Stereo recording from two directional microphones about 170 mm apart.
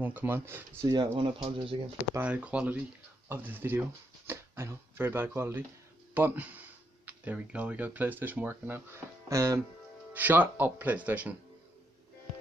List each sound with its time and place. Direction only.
0.0 s speech: 10° right (ahead or behind)
0.8 s speech: 30° right (ahead or behind)
2.1 s speech: 10° right (ahead or behind)